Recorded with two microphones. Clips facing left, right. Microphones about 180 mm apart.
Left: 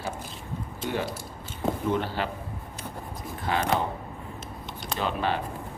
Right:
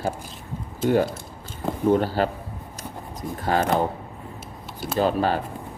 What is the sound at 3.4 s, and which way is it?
Speech, 45° right (ahead or behind).